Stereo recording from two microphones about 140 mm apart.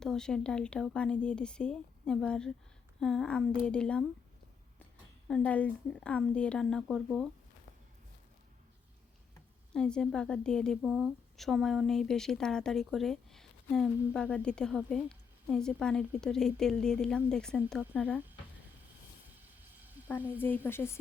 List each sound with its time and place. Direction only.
0.0 s a woman's voice: 5° left (ahead or behind)
5.3 s speech: 10° left (ahead or behind)
9.7 s a woman's voice: 5° left (ahead or behind)
20.1 s speech: 15° left (ahead or behind)